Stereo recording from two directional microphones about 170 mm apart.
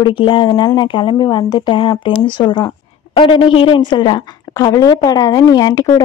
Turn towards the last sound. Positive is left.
turn(degrees=25)  # may be behind; listen again after turning